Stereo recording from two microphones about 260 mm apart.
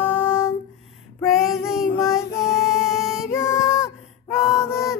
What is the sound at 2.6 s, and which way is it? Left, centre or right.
Music, centre.